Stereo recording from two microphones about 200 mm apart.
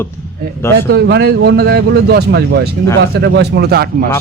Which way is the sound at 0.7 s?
55° right (ahead or behind).